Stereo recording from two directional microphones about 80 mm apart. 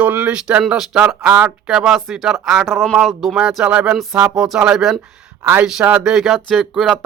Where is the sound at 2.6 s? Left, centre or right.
Centre.